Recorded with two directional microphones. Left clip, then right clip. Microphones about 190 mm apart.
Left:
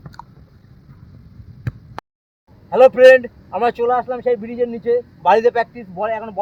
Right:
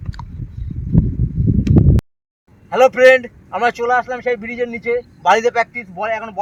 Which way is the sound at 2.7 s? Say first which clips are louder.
Left 2 dB; 15° right (ahead or behind).